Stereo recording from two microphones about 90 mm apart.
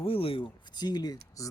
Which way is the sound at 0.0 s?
90° left.